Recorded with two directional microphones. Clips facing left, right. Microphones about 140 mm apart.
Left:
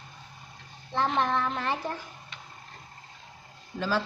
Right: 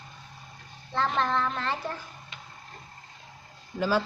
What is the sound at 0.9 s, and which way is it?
Speech, 15° left (ahead or behind).